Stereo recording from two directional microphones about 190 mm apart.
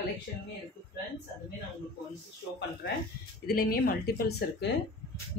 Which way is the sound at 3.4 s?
50° left (ahead or behind).